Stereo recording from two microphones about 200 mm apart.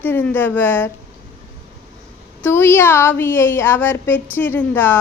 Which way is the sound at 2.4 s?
10° left (ahead or behind).